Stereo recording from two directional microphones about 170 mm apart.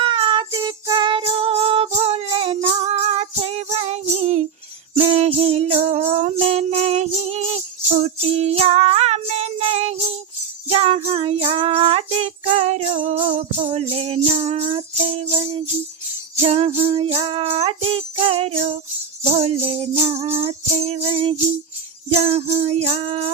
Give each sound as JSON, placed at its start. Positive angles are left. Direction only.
{"t": 0.0, "sound": "music", "side_deg": -30}
{"t": 13.1, "sound": "music", "side_deg": -30}
{"t": 20.3, "sound": "jingle bell", "side_deg": -35}
{"t": 22.1, "sound": "music", "side_deg": -35}